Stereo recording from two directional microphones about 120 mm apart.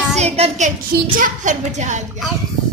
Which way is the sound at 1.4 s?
80° right.